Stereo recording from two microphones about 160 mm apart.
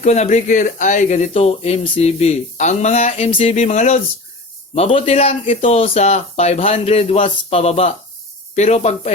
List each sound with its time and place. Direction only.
0.0 s a man's voice: 45° left (ahead or behind)